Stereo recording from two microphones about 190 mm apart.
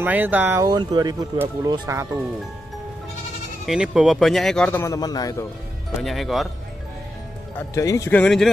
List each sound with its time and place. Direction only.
0.0 s speech: 10° right (ahead or behind)
3.6 s speech: 5° right (ahead or behind); by 5.4 s 20° left (ahead or behind)
6.0 s speech: centre (ahead or behind)
7.5 s speech: 15° left (ahead or behind)